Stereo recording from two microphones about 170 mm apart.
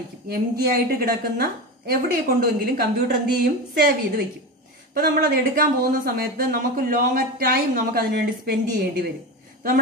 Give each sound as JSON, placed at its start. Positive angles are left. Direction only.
{"t": 0.3, "sound": "a woman's voice", "side_deg": -65}
{"t": 4.9, "sound": "speech", "side_deg": -65}